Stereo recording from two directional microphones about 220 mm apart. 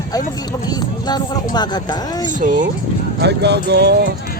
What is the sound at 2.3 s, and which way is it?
Speech, 35° right (ahead or behind).